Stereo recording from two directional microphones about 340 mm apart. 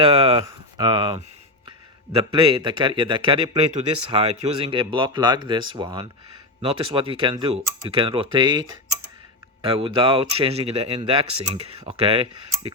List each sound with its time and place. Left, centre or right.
0.0 s speech: centre
9.6 s speech: centre